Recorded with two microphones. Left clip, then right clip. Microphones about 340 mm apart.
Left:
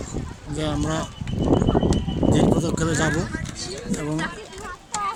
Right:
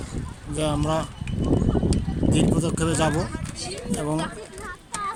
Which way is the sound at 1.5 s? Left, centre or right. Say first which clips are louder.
Left 4 dB; left.